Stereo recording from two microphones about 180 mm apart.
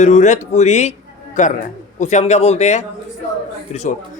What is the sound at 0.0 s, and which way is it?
A man's voice, 40° left (ahead or behind).